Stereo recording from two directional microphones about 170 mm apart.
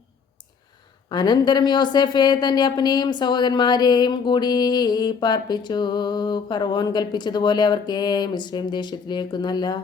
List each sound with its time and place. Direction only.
1.1 s a woman's voice: 25° left (ahead or behind)